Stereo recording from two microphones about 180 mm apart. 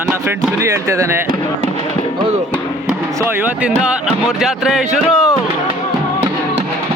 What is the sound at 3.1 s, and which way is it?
Speech, 15° right (ahead or behind).